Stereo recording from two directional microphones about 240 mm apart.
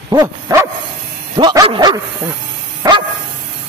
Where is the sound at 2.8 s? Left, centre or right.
Centre.